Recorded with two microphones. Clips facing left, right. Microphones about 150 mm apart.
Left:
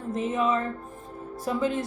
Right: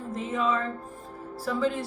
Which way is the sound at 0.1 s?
20° left (ahead or behind).